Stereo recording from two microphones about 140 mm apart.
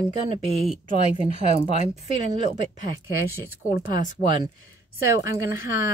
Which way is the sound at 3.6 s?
75° left (ahead or behind).